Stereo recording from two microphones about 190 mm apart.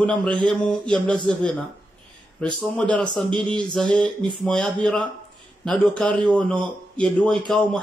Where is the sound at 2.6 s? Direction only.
5° left (ahead or behind).